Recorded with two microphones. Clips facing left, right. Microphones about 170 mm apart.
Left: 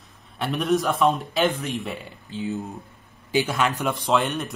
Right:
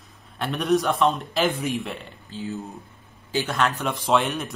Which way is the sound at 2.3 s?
20° left (ahead or behind).